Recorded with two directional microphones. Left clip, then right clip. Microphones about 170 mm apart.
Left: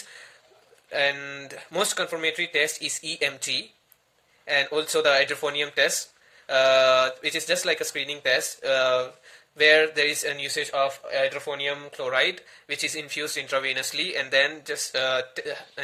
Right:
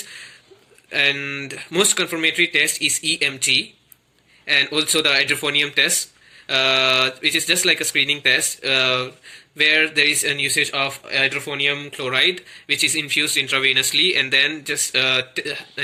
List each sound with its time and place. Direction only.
0.9 s speech: 45° left (ahead or behind)